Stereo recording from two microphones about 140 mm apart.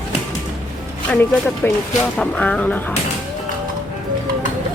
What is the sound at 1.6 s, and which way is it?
Speech, 15° left (ahead or behind).